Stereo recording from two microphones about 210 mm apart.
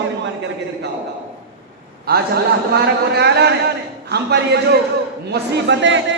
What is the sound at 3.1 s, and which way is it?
A man's voice, 50° right (ahead or behind).